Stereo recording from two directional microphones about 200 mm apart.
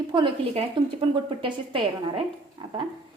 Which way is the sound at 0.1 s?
25° right (ahead or behind).